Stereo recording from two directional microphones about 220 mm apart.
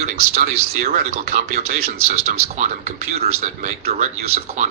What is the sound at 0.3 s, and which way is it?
Speech, 45° right (ahead or behind).